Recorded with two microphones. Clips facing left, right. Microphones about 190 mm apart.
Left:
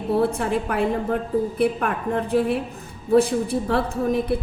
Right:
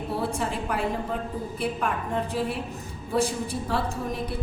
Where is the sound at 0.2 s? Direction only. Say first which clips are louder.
Left 6 dB; 60° left (ahead or behind).